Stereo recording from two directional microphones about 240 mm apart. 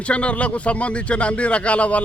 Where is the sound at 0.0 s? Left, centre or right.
Centre.